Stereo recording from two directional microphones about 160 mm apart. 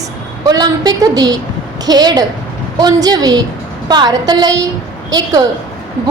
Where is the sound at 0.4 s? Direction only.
25° right (ahead or behind).